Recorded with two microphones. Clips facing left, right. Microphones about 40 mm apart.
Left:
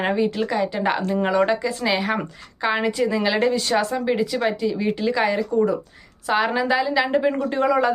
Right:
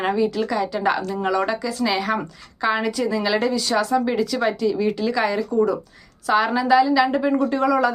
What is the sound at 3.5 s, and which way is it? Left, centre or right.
Speech, left.